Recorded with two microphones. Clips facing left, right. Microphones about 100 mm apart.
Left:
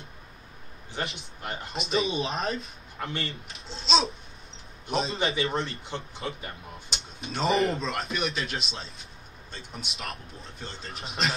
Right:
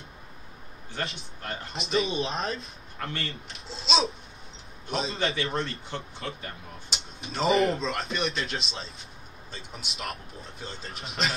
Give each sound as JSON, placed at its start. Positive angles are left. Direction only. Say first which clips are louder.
{"t": 0.9, "sound": "a man's voice", "louder": "left 1 dB", "side_deg": 15}
{"t": 1.7, "sound": "speech", "louder": "even", "side_deg": 0}
{"t": 3.0, "sound": "speech", "louder": "left 1 dB", "side_deg": 15}
{"t": 3.5, "sound": "speech", "louder": "left 1 dB", "side_deg": 0}
{"t": 5.1, "sound": "a man's voice", "louder": "left 1 dB", "side_deg": 20}
{"t": 6.9, "sound": "speech", "louder": "left 1 dB", "side_deg": 0}